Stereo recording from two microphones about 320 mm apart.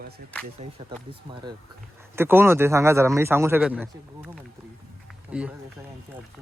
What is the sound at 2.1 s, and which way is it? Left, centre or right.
A man's voice, centre.